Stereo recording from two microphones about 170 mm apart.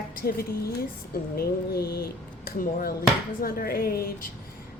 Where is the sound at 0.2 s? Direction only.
60° left (ahead or behind).